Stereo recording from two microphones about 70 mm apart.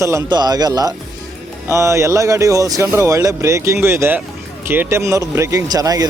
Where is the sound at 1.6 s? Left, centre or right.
Right.